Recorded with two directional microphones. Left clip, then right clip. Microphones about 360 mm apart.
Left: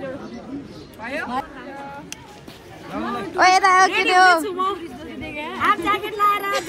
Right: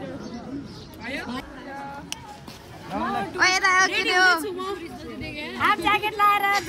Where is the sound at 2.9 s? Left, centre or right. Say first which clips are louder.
Even; centre.